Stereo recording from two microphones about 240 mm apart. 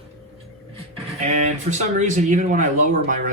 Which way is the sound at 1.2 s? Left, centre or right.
Right.